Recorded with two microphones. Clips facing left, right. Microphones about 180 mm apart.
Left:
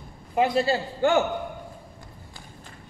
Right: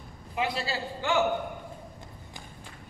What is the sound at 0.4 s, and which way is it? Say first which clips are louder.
Speech: left 9 dB; 50° left (ahead or behind).